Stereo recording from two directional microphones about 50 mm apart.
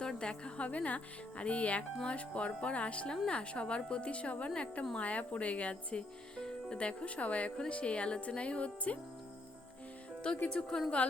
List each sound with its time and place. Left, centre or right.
0.0 s speech: centre
10.2 s speech: left